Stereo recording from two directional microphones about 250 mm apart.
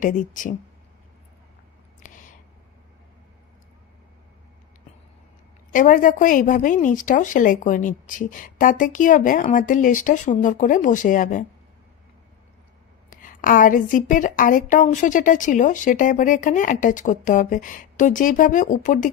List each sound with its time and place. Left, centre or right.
0.0 s a woman's voice: left
2.0 s a sound: left
5.7 s a woman's voice: left
13.1 s a woman's voice: left